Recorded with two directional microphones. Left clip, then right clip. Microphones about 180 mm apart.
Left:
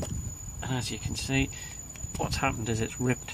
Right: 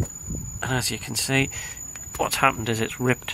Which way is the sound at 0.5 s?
30° right (ahead or behind).